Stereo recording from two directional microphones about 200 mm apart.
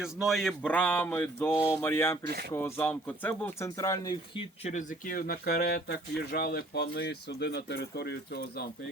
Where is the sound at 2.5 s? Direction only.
10° left (ahead or behind).